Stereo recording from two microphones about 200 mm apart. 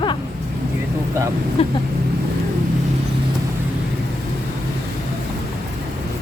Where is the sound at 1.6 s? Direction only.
30° left (ahead or behind).